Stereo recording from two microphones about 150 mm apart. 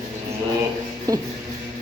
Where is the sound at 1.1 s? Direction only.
25° right (ahead or behind).